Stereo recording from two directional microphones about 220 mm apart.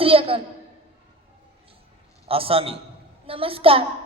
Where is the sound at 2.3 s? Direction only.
25° right (ahead or behind).